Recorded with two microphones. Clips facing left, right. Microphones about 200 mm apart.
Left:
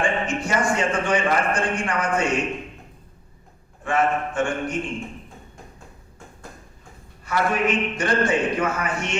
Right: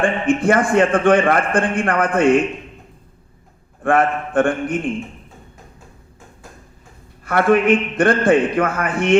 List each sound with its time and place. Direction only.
0.0 s a man's voice: 55° right (ahead or behind)
3.8 s a man's voice: 55° right (ahead or behind)
7.3 s a man's voice: 55° right (ahead or behind)